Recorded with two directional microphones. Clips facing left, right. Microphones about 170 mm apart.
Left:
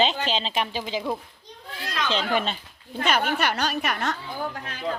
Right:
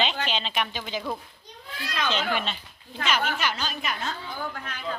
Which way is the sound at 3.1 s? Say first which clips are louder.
Left 3 dB; 55° left (ahead or behind).